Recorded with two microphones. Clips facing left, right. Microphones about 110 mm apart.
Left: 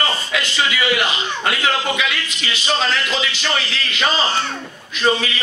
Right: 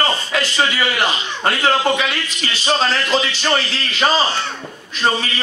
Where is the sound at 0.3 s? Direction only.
40° right (ahead or behind).